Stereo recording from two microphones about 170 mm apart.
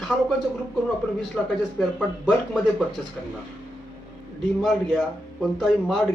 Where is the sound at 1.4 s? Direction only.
5° left (ahead or behind).